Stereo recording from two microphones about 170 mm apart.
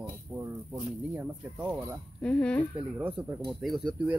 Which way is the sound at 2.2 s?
5° left (ahead or behind).